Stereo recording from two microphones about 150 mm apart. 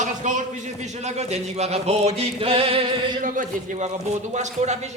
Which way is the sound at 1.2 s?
45° right (ahead or behind).